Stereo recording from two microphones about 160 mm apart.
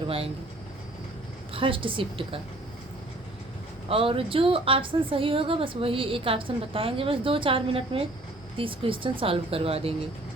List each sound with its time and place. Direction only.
1.5 s a woman's voice: 35° right (ahead or behind)
3.8 s a woman's voice: 35° right (ahead or behind)